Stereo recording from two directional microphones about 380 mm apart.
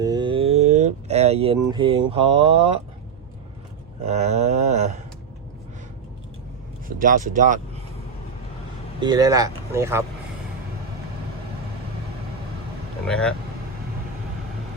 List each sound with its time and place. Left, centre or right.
0.0 s a sound: centre
4.0 s speech: centre
6.8 s speech: right
9.0 s speech: centre
13.1 s speech: centre